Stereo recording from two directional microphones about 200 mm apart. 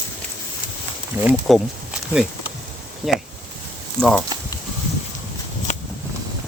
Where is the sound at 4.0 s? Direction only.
10° right (ahead or behind).